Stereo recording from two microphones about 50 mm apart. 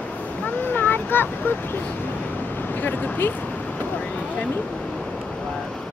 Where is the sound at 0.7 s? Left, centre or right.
Left.